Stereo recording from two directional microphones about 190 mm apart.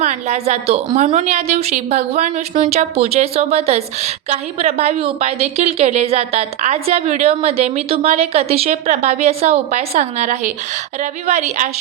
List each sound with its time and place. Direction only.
0.0 s a woman's voice: 35° right (ahead or behind)